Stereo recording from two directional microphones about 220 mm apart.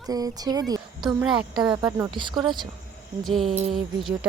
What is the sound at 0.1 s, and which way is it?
Speech, 15° right (ahead or behind).